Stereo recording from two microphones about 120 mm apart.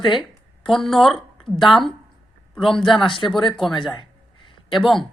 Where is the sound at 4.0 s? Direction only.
40° left (ahead or behind).